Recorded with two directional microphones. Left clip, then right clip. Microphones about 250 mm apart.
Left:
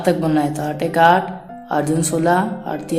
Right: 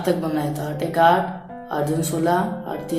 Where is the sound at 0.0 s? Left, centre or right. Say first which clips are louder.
Left 5 dB; left.